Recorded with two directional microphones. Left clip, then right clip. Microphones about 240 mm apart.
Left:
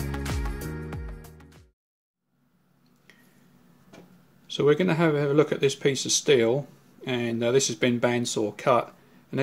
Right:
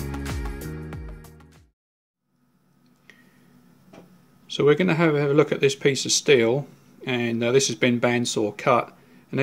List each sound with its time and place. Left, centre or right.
0.1 s music: centre
3.1 s a sound: centre
4.5 s speech: centre